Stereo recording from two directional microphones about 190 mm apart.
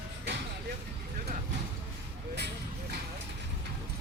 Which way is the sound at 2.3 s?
60° right (ahead or behind).